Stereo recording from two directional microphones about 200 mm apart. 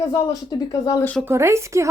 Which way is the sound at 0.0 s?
15° left (ahead or behind).